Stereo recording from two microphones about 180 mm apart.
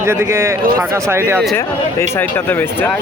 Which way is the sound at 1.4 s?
10° left (ahead or behind).